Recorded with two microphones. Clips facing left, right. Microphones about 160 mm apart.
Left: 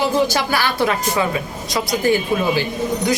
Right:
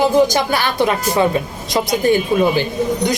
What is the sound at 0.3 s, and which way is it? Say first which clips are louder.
Speech: right 2 dB; 20° right (ahead or behind).